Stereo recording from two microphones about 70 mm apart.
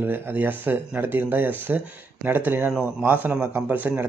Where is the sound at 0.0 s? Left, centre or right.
Right.